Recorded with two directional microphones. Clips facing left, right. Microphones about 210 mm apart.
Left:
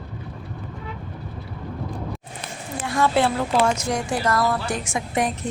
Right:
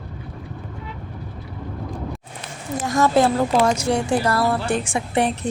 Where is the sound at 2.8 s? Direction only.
45° right (ahead or behind).